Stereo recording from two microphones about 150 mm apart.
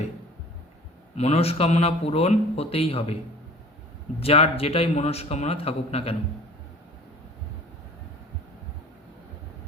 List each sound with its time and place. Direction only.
1.1 s speech: 45° left (ahead or behind)
4.2 s speech: 40° left (ahead or behind)